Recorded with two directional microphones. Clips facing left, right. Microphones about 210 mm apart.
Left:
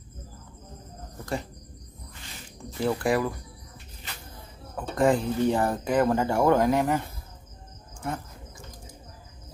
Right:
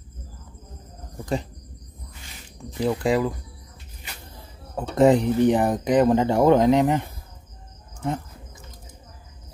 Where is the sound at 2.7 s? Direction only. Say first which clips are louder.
Right 3 dB; 15° right (ahead or behind).